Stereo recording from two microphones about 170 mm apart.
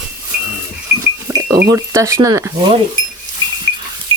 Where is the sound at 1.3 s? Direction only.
20° right (ahead or behind).